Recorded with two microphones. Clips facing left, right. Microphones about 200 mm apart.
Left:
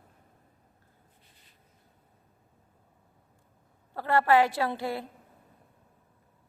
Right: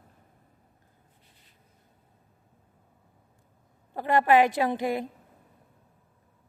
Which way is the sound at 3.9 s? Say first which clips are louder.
Right 2 dB; 15° right (ahead or behind).